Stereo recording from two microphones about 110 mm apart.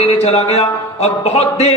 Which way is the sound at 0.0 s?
65° left (ahead or behind).